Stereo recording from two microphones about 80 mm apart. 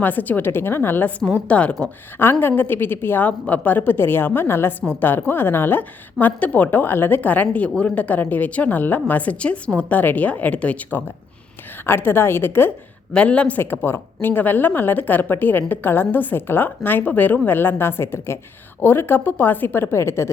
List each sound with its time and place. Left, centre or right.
0.0 s a woman's voice: left
1.5 s speech: centre
2.4 s a woman's voice: left
11.9 s a woman's voice: left
13.1 s speech: centre
13.6 s a woman's voice: left